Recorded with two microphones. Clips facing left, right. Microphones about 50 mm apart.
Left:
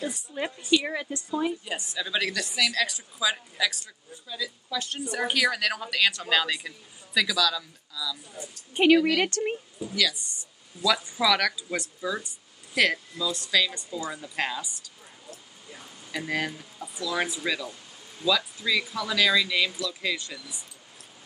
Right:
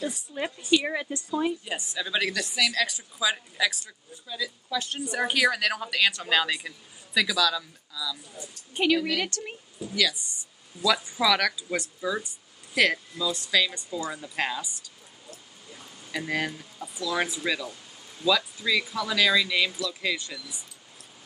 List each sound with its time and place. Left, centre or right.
0.7 s a woman's voice: centre
8.4 s a woman's voice: left
9.9 s a woman's voice: centre
16.1 s a woman's voice: centre